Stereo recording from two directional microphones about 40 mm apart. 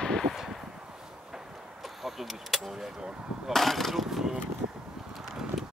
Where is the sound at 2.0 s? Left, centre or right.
Centre.